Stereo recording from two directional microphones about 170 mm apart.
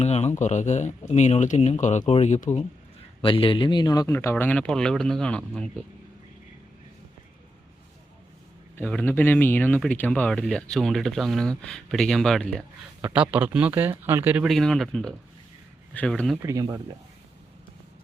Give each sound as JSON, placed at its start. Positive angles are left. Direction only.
{"t": 0.0, "sound": "speech", "side_deg": 40}
{"t": 3.2, "sound": "speech", "side_deg": 30}
{"t": 8.7, "sound": "speech", "side_deg": 5}
{"t": 13.0, "sound": "speech", "side_deg": -10}
{"t": 16.4, "sound": "speech", "side_deg": -20}